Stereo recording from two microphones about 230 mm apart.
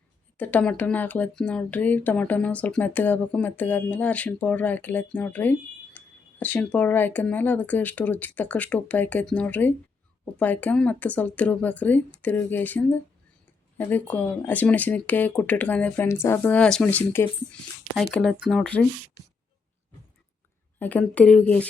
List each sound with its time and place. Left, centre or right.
0.3 s speech: centre
20.7 s speech: centre